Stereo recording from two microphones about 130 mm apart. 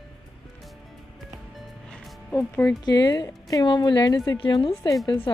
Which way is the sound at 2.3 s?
25° left (ahead or behind).